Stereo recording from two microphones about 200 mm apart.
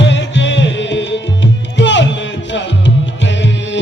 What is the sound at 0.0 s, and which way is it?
Music, 65° left (ahead or behind).